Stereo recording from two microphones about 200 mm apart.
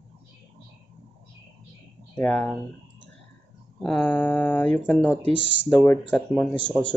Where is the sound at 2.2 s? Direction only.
5° left (ahead or behind).